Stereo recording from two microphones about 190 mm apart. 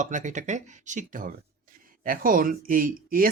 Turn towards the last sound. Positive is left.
turn(degrees=-45)  # may be behind; listen again after turning